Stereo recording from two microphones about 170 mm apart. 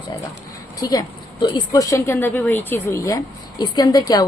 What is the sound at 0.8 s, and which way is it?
A woman's voice, 20° left (ahead or behind).